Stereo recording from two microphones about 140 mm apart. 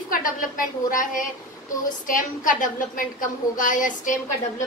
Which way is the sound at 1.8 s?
70° left (ahead or behind).